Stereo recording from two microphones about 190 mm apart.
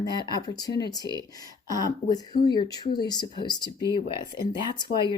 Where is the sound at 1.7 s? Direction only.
20° left (ahead or behind).